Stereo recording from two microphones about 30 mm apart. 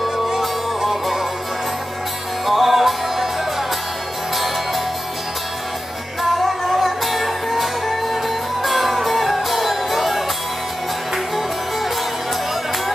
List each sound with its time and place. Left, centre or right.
0.4 s music: centre
2.4 s music: centre
6.2 s music: centre